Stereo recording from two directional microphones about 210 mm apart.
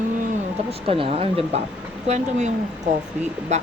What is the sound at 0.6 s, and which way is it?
Speech, 25° right (ahead or behind).